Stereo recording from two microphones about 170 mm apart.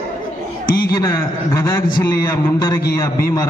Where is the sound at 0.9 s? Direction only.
20° left (ahead or behind).